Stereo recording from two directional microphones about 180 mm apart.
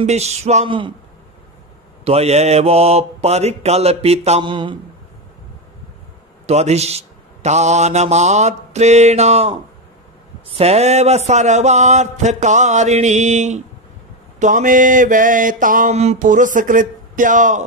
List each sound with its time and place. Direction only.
0.0 s a man's voice: 40° right (ahead or behind)
2.0 s a man's voice: 35° right (ahead or behind)
6.4 s a man's voice: 35° right (ahead or behind)
14.4 s mantra: 45° right (ahead or behind)